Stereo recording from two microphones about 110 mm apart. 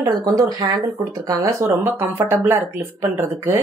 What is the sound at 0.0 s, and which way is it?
Speech, 35° right (ahead or behind).